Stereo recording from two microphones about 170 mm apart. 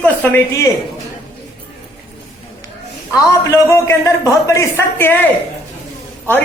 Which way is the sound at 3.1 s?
20° left (ahead or behind).